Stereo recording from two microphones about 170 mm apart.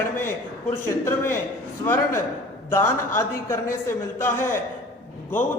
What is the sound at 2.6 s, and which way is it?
A man's voice, 15° left (ahead or behind).